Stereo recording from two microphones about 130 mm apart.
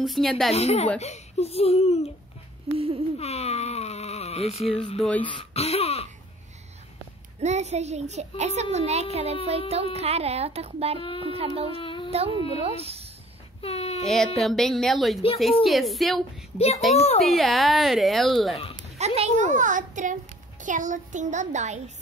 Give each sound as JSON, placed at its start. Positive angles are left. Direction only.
{"t": 0.0, "sound": "speech", "side_deg": 0}
{"t": 0.6, "sound": "speech", "side_deg": 55}
{"t": 2.7, "sound": "speech", "side_deg": -45}
{"t": 3.2, "sound": "a sound", "side_deg": 55}
{"t": 4.9, "sound": "speech", "side_deg": 5}
{"t": 5.2, "sound": "speech", "side_deg": 50}
{"t": 7.3, "sound": "a child's voice", "side_deg": -60}
{"t": 11.7, "sound": "a sound", "side_deg": 45}
{"t": 12.1, "sound": "speech", "side_deg": -50}
{"t": 13.6, "sound": "speech", "side_deg": 50}
{"t": 14.0, "sound": "speech", "side_deg": 5}
{"t": 16.5, "sound": "speech", "side_deg": 55}
{"t": 17.2, "sound": "speech", "side_deg": 0}
{"t": 18.9, "sound": "a child's voice", "side_deg": -55}